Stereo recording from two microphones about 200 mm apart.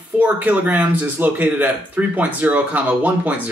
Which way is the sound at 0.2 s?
10° right (ahead or behind).